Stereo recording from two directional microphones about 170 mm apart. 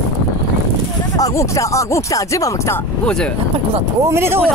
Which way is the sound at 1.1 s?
20° left (ahead or behind).